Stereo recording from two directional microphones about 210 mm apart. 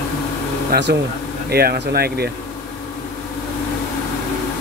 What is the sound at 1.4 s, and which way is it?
Speech, 50° right (ahead or behind).